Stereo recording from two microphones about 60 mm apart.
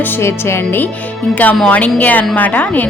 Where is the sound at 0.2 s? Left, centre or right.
Left.